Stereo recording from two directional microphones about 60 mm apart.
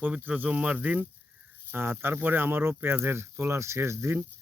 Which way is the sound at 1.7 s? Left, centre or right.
Right.